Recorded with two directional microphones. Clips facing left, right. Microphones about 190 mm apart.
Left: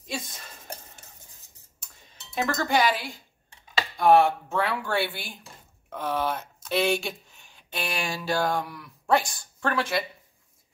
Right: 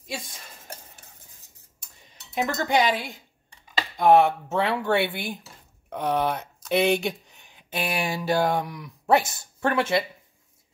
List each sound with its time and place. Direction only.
0.0 s dishes: 10° right (ahead or behind)
2.3 s speech: 20° right (ahead or behind)
5.9 s a sound: 20° right (ahead or behind)
7.7 s speech: centre (ahead or behind)
8.1 s speech: 20° right (ahead or behind)